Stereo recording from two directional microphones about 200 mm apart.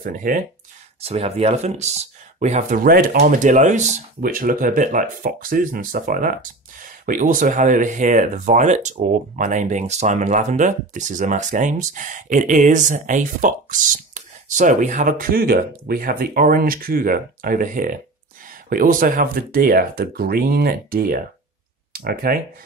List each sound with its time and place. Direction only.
0.0 s speech: 45° right (ahead or behind)
1.0 s speech: 30° right (ahead or behind); by 22.4 s 45° right (ahead or behind)